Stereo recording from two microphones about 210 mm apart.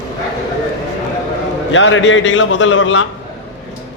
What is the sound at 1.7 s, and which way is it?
A man's voice, 65° left (ahead or behind).